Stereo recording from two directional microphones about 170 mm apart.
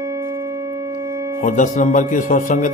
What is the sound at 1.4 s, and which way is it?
Mantra, 50° left (ahead or behind).